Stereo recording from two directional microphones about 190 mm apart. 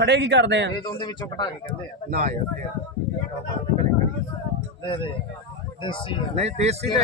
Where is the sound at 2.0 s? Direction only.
40° right (ahead or behind).